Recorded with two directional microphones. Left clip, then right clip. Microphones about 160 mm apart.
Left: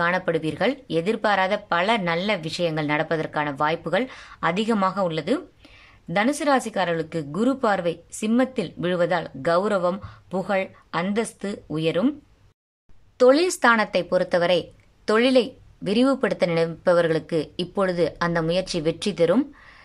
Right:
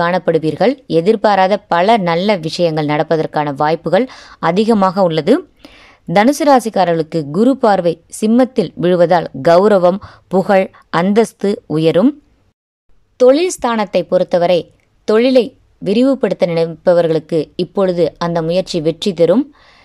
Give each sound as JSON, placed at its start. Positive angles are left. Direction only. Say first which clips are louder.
{"t": 0.0, "sound": "speech", "louder": "right 9 dB", "side_deg": -30}
{"t": 13.2, "sound": "a woman's voice", "louder": "right 6 dB", "side_deg": -20}